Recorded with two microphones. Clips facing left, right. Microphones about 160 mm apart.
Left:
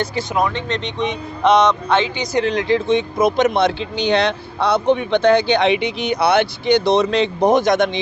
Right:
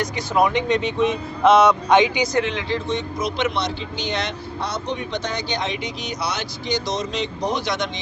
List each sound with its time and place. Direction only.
0.3 s speech: 15° right (ahead or behind)
1.9 s speech: 15° right (ahead or behind)
2.3 s speech: 35° left (ahead or behind)
2.7 s speech: 55° left (ahead or behind)
3.8 s speech: 65° left (ahead or behind)